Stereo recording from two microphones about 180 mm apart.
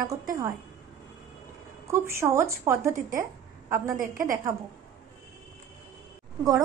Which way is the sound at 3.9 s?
50° right (ahead or behind).